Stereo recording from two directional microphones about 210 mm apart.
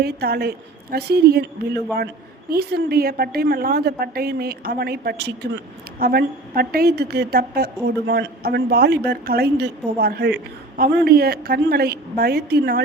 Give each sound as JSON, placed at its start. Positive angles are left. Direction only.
{"t": 0.0, "sound": "a woman's voice", "side_deg": -50}
{"t": 2.5, "sound": "a woman's voice", "side_deg": -50}